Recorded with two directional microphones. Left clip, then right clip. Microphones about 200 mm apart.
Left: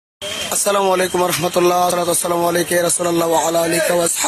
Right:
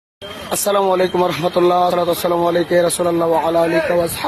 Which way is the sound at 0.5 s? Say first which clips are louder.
Right 1 dB; centre (ahead or behind).